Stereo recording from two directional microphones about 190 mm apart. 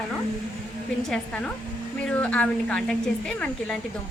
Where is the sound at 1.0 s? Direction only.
Centre (ahead or behind).